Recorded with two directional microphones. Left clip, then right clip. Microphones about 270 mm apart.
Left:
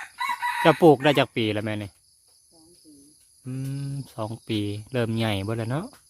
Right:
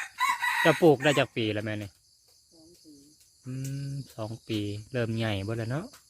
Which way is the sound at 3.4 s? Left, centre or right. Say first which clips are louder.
Left 4 dB; centre.